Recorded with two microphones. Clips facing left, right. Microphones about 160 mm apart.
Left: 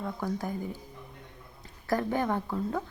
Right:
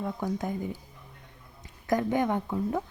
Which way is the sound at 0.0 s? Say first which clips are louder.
Right 2 dB; 20° right (ahead or behind).